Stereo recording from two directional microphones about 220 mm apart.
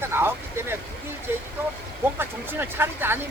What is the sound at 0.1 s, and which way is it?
Vehicle, 10° right (ahead or behind).